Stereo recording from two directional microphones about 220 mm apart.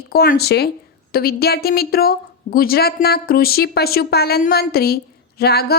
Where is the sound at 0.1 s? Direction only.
45° left (ahead or behind).